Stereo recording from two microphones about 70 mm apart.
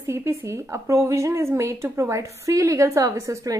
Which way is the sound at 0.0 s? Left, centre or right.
Right.